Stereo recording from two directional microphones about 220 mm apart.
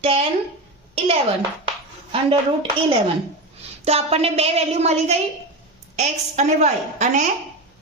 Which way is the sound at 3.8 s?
30° right (ahead or behind).